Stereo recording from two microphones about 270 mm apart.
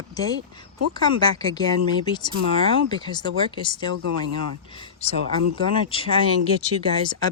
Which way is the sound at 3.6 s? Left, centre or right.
Centre.